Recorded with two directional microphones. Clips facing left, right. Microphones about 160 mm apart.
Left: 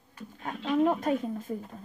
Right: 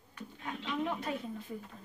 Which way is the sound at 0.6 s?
45° left (ahead or behind).